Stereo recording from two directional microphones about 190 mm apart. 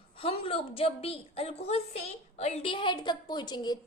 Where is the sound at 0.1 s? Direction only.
30° left (ahead or behind).